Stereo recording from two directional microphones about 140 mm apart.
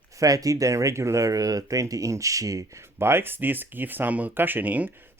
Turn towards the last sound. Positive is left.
turn(degrees=-10)  # may be behind; listen again after turning